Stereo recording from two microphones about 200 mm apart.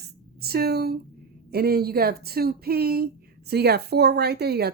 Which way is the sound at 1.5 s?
50° right (ahead or behind).